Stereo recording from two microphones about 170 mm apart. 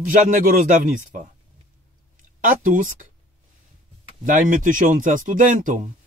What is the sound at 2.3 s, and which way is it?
Speech, 50° right (ahead or behind).